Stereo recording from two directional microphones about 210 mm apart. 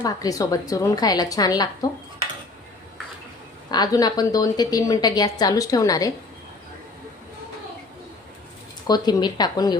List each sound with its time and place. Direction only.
0.0 s a woman's voice: 15° left (ahead or behind)
3.7 s a woman's voice: 20° left (ahead or behind)
8.9 s speech: 20° left (ahead or behind)